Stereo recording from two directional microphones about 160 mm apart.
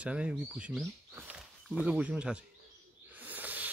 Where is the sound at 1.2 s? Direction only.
5° right (ahead or behind).